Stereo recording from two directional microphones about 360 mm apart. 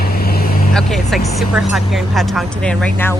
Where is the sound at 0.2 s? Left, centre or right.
Left.